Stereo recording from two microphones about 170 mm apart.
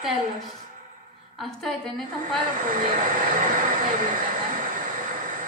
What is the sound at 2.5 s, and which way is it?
Vehicle, 55° right (ahead or behind).